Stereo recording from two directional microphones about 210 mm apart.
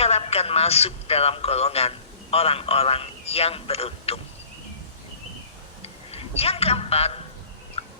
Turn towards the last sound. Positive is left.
turn(degrees=30)  # may be behind; listen again after turning